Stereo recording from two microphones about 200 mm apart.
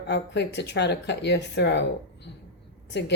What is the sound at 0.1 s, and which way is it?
A woman's voice, 60° left (ahead or behind).